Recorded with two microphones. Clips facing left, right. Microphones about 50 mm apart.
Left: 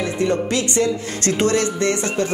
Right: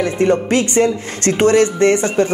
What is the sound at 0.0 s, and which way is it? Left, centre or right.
Speech, right.